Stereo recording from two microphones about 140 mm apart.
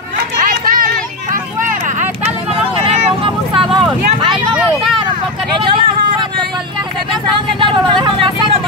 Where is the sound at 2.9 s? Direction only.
40° right (ahead or behind).